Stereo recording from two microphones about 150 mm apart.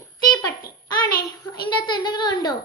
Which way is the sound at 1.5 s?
30° left (ahead or behind).